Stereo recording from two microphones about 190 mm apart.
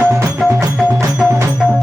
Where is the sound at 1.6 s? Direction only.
5° right (ahead or behind).